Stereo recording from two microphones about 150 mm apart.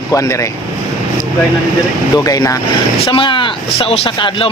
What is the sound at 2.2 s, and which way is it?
Speech, 25° left (ahead or behind).